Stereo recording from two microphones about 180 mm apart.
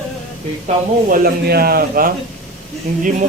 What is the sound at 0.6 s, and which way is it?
Speech, 50° right (ahead or behind).